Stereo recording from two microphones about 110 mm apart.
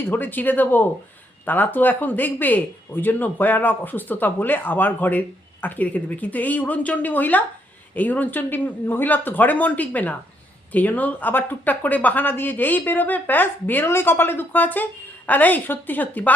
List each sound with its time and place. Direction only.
0.0 s speech: 20° left (ahead or behind)